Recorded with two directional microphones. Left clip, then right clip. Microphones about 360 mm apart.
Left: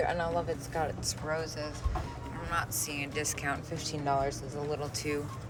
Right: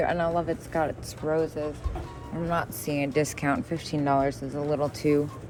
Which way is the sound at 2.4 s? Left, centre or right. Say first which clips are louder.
Right 5 dB; centre.